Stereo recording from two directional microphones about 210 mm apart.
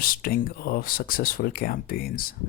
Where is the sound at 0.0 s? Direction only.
45° left (ahead or behind).